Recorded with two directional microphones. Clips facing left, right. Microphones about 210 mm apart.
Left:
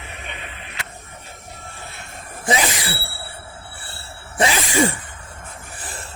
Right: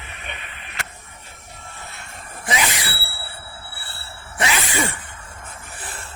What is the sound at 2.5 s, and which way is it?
Sneeze, 30° left (ahead or behind).